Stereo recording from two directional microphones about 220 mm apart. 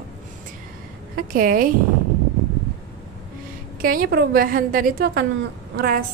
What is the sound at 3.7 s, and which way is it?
A woman's voice, 40° right (ahead or behind).